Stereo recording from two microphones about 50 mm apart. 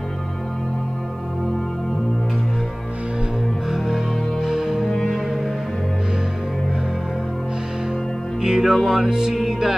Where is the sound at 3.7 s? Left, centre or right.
Centre.